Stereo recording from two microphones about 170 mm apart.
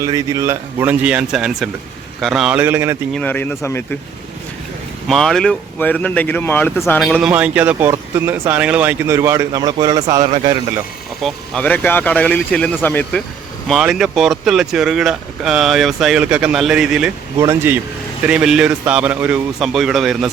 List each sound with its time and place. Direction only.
0.0 s speech: 20° right (ahead or behind)
3.1 s speech: 5° left (ahead or behind)
5.0 s speech: centre (ahead or behind)
7.0 s speech: centre (ahead or behind); by 10.5 s 30° right (ahead or behind)
11.2 s speech: 5° left (ahead or behind)
13.7 s speech: centre (ahead or behind)
17.3 s speech: 15° right (ahead or behind); by 20.3 s centre (ahead or behind)